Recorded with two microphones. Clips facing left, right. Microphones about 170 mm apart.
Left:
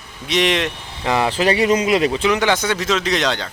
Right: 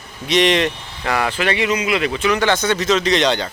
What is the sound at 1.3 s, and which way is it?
Speech, 35° left (ahead or behind).